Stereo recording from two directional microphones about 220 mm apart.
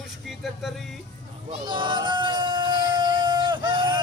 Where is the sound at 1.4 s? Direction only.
20° right (ahead or behind).